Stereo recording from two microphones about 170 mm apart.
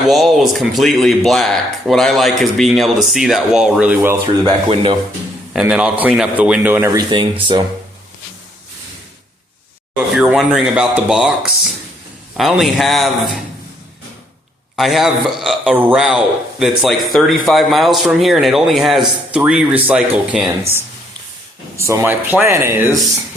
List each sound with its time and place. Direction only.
0.1 s speech: centre (ahead or behind)
4.4 s speech: 30° right (ahead or behind)
5.5 s speech: 5° right (ahead or behind); by 7.3 s 25° right (ahead or behind)
10.2 s speech: 5° right (ahead or behind)
14.8 s speech: centre (ahead or behind)
21.8 s speech: 15° right (ahead or behind)